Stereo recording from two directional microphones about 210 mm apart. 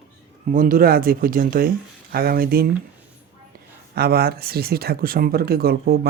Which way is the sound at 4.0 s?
50° right (ahead or behind).